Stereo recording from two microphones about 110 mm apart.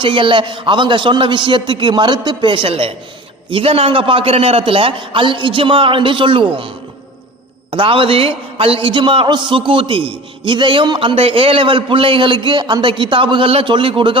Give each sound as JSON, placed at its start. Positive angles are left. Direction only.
{"t": 0.0, "sound": "a man's voice", "side_deg": -50}
{"t": 7.7, "sound": "a man's voice", "side_deg": -55}